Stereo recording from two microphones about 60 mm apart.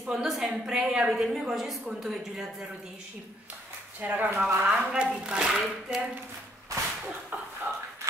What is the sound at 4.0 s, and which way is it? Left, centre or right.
Speech, right.